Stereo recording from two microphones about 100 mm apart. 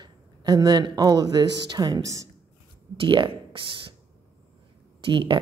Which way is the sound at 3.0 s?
55° right (ahead or behind).